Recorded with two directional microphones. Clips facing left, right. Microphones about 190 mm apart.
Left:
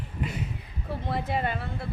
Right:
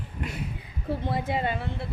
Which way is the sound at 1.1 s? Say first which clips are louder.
Even; 25° right (ahead or behind).